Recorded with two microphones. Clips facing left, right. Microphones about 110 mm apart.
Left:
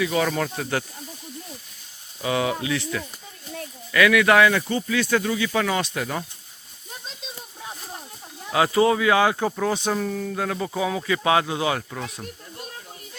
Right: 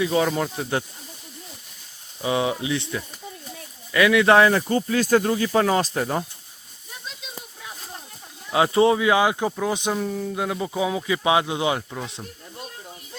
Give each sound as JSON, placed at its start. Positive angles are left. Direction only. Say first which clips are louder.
{"t": 0.0, "sound": "speech", "louder": "right 2 dB", "side_deg": -25}
{"t": 0.3, "sound": "speech", "louder": "right 1 dB", "side_deg": -15}
{"t": 2.2, "sound": "speech", "louder": "right 1 dB", "side_deg": -25}
{"t": 8.5, "sound": "speech", "louder": "right 1 dB", "side_deg": -25}